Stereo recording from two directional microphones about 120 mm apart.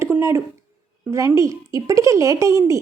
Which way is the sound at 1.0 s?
25° right (ahead or behind).